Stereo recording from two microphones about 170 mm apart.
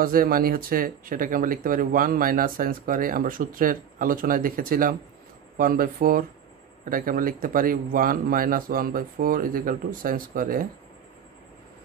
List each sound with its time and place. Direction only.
0.0 s speech: 55° right (ahead or behind)